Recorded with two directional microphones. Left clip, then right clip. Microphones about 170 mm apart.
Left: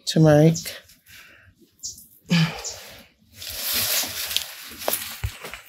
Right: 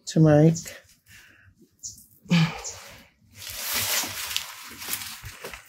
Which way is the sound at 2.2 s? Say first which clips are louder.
Left 2 dB; 5° left (ahead or behind).